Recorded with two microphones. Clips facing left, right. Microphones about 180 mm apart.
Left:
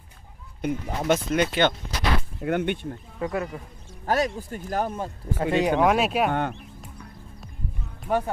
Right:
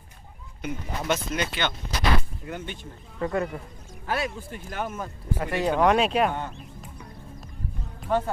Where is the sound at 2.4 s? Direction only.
65° left (ahead or behind).